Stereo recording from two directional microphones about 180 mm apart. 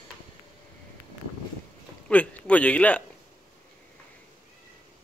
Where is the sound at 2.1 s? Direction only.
5° left (ahead or behind).